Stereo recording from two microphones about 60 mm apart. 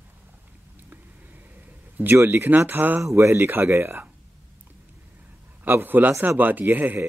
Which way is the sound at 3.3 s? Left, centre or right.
Right.